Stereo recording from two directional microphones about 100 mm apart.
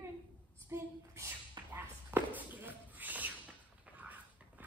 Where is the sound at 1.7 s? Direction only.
20° right (ahead or behind).